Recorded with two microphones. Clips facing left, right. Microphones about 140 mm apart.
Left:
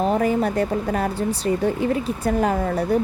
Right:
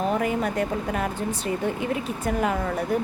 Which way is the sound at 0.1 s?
35° left (ahead or behind).